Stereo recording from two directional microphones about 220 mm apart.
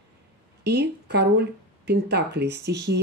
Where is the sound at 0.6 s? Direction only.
50° right (ahead or behind).